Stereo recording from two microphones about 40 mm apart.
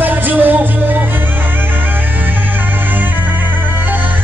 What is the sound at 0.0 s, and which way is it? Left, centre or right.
Music, right.